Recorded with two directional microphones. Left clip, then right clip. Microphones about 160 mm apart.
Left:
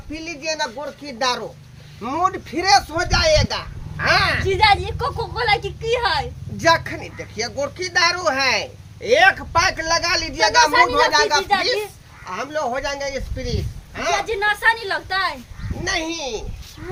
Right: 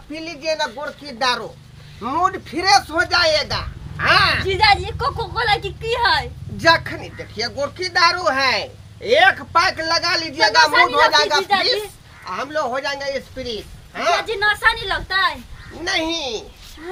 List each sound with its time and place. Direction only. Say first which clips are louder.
0.1 s speech: right 2 dB; 5° right (ahead or behind); by 6.2 s 25° right (ahead or behind)
6.6 s speech: right 2 dB; centre (ahead or behind)
12.3 s speech: right 1 dB; centre (ahead or behind)